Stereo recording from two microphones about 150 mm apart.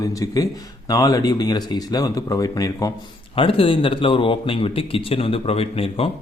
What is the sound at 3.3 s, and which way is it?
A man's voice, 35° left (ahead or behind).